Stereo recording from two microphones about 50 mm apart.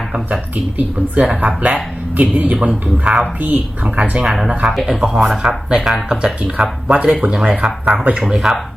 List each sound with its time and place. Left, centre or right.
0.8 s speech: right
2.1 s speech: right
2.6 s speech: right
3.4 s speech: right
4.3 s speech: centre